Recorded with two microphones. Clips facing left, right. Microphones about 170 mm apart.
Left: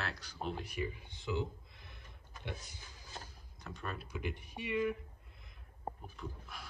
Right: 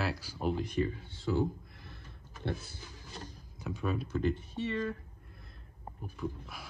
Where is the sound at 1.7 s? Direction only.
15° left (ahead or behind).